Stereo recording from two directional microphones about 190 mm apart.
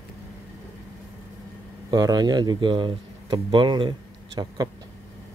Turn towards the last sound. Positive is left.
turn(degrees=-20)  # may be behind; listen again after turning